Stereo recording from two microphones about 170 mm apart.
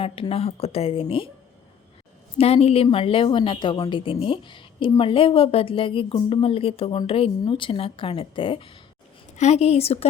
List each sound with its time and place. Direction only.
0.0 s a woman's voice: 35° left (ahead or behind)
2.4 s a woman's voice: 35° left (ahead or behind)